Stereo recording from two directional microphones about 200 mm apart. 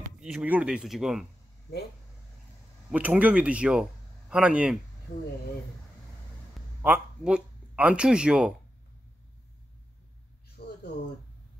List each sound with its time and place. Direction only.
0.2 s speech: 5° right (ahead or behind)
2.9 s speech: 10° right (ahead or behind)
6.8 s speech: 5° right (ahead or behind)
10.6 s a sound: 50° left (ahead or behind)